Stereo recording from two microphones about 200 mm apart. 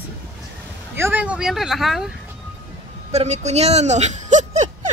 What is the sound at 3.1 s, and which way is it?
Speech, 35° right (ahead or behind).